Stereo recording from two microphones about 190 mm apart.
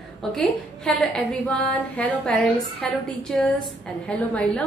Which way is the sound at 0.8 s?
5° left (ahead or behind).